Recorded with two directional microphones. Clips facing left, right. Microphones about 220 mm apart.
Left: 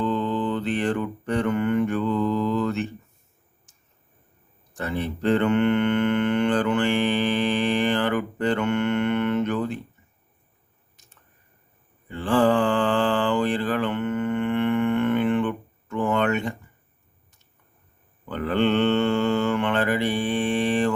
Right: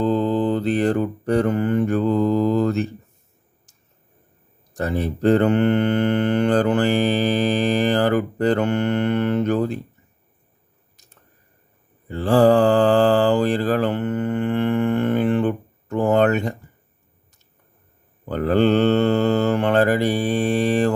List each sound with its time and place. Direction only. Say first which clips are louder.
0.0 s mantra: right 5 dB; 35° right (ahead or behind)
4.7 s mantra: right 5 dB; 40° right (ahead or behind)
10.9 s a sound: right 3 dB; 40° right (ahead or behind)
12.0 s mantra: right 5 dB; 40° right (ahead or behind)
18.3 s mantra: right 5 dB; 40° right (ahead or behind)